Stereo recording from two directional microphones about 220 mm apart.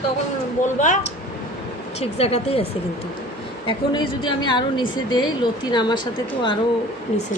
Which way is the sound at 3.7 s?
20° left (ahead or behind).